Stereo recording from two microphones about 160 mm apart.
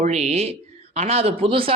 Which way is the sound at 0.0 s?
40° right (ahead or behind).